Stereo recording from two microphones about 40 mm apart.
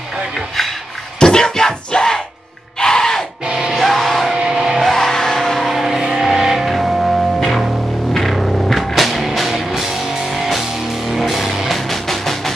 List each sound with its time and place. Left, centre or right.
1.2 s music: centre
2.8 s a sound: centre
3.4 s music: centre
3.7 s music: centre
4.4 s a sound: centre
4.8 s vehicle: centre
5.7 s music: centre
7.3 s music: centre